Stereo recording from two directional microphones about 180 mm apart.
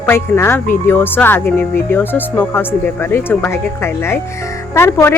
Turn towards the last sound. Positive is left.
turn(degrees=15)  # may be behind; listen again after turning